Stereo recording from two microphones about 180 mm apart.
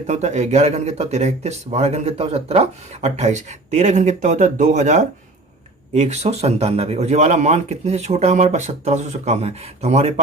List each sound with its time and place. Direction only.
0.1 s speech: 40° right (ahead or behind)